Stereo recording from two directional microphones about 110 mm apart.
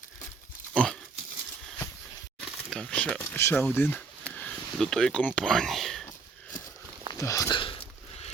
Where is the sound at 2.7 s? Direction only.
10° left (ahead or behind).